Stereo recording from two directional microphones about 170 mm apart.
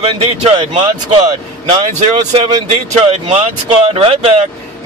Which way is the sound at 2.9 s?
40° right (ahead or behind).